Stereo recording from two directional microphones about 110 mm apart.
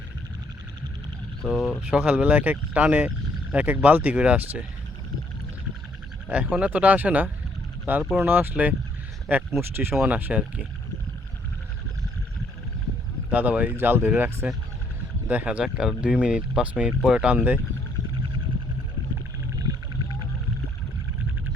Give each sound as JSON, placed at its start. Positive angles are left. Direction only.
{"t": 1.5, "sound": "speech", "side_deg": -5}
{"t": 1.9, "sound": "speech", "side_deg": -15}
{"t": 6.2, "sound": "speech", "side_deg": -15}
{"t": 13.3, "sound": "speech", "side_deg": -15}